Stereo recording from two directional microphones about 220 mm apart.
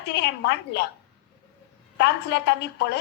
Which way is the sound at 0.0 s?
50° left (ahead or behind).